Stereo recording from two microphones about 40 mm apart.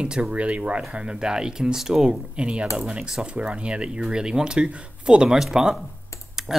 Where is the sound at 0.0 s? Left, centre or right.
Right; by 2.0 s centre.